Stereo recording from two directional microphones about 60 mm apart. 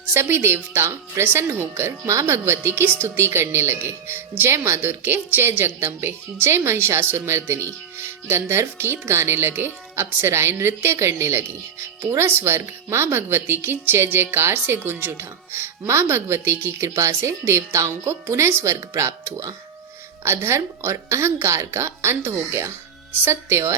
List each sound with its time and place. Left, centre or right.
0.1 s speech: right
20.2 s speech: right